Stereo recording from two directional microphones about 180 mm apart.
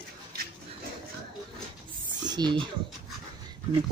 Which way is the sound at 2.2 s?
25° right (ahead or behind).